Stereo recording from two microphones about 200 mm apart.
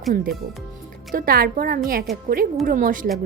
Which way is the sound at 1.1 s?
45° right (ahead or behind).